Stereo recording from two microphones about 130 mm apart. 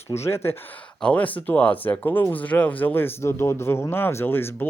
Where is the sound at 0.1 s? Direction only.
20° left (ahead or behind).